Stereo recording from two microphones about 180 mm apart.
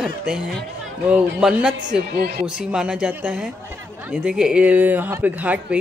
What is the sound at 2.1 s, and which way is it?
Speech, 60° right (ahead or behind).